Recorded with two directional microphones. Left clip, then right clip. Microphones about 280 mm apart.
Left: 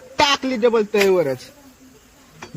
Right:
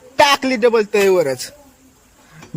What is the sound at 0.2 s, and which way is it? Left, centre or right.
A man's voice, right.